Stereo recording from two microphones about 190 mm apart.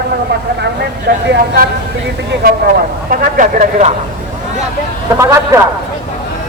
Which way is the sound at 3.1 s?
40° right (ahead or behind).